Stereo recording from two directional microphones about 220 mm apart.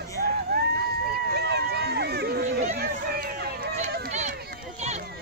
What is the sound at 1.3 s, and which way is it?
Run, 50° right (ahead or behind).